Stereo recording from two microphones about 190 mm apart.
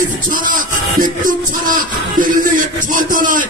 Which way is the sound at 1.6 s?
45° right (ahead or behind).